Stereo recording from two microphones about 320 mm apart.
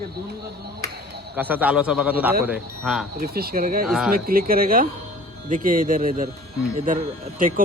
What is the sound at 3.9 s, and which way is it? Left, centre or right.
Speech, centre.